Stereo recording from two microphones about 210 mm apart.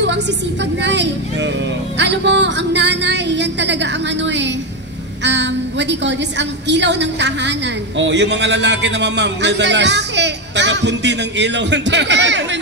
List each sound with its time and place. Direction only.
0.8 s a man's voice: 55° right (ahead or behind)